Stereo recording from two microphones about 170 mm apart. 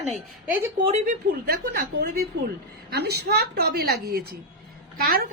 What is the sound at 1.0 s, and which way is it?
A woman's voice, 55° right (ahead or behind).